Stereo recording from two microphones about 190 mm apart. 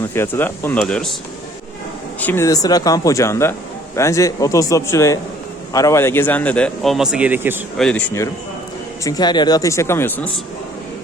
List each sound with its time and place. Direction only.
0.1 s a man's voice: 10° left (ahead or behind)
2.2 s a man's voice: 15° left (ahead or behind); by 7.6 s 10° right (ahead or behind)
7.8 s a man's voice: 5° left (ahead or behind)